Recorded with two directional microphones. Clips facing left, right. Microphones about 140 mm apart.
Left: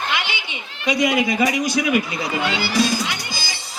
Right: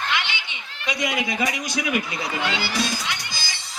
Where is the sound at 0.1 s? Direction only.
10° left (ahead or behind).